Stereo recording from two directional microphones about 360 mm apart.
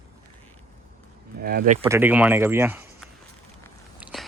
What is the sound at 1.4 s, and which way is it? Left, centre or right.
Speech, right.